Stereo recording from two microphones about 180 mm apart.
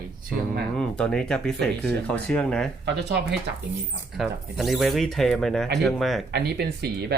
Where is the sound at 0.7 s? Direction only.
5° left (ahead or behind).